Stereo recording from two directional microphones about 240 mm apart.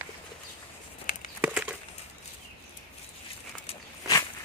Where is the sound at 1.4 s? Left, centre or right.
Centre.